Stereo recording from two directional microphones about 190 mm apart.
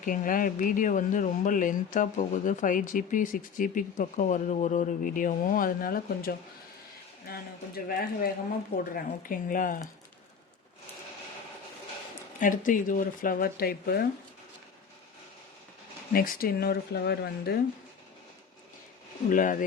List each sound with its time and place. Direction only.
0.0 s speech: 45° left (ahead or behind)
7.9 s speech: 50° left (ahead or behind)
12.4 s speech: 45° left (ahead or behind)
16.1 s speech: 50° left (ahead or behind)
19.3 s speech: 45° left (ahead or behind)